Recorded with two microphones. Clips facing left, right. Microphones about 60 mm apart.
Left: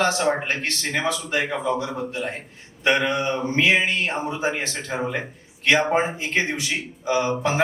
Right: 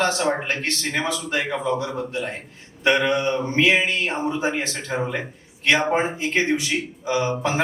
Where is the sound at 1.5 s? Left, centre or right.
Centre.